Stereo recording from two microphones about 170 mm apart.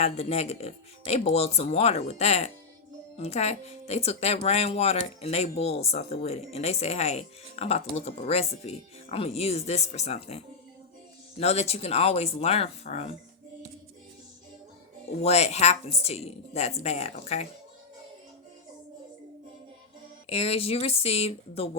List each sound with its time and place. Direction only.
0.0 s speech: 40° left (ahead or behind)
15.2 s speech: 40° left (ahead or behind)
20.3 s speech: 35° left (ahead or behind)